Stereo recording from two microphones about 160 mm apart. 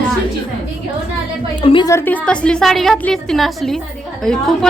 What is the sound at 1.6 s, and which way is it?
Speech, 35° left (ahead or behind).